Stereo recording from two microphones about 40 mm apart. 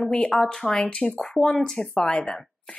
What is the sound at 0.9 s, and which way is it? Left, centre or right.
Speech, left.